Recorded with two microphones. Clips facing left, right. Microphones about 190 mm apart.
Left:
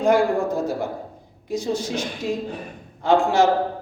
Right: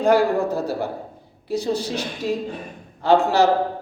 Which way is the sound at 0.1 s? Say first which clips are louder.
Right 1 dB; 35° right (ahead or behind).